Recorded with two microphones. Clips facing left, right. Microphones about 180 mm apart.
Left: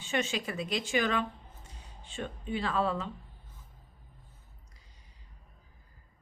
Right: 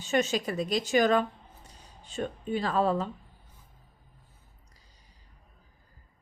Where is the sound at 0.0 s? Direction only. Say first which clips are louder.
Right 5 dB; 40° right (ahead or behind).